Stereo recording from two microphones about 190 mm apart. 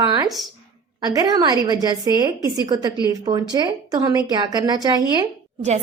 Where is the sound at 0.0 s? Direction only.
20° right (ahead or behind).